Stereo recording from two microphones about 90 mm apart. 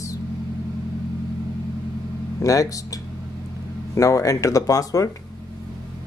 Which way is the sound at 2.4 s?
40° left (ahead or behind).